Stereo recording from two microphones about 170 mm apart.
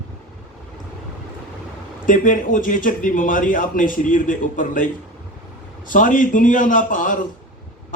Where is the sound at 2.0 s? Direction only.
50° left (ahead or behind).